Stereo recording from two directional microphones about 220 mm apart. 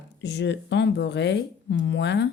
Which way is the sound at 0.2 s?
55° left (ahead or behind).